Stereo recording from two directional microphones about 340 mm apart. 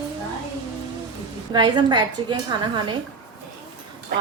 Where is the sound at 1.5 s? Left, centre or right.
Centre.